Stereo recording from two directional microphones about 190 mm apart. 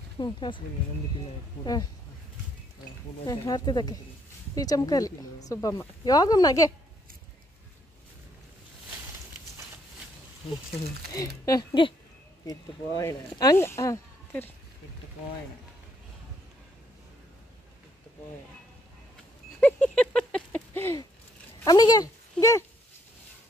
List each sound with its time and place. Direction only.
0.2 s speech: 25° left (ahead or behind)
1.6 s speech: 20° left (ahead or behind)
3.3 s speech: 20° left (ahead or behind)
11.1 s speech: 20° left (ahead or behind)
19.6 s a sound: 5° left (ahead or behind)
21.6 s speech: 20° left (ahead or behind)